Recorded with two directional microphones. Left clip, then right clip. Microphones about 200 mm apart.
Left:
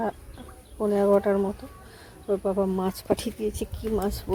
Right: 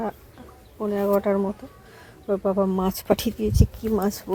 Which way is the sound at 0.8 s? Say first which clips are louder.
Left 1 dB; 5° left (ahead or behind).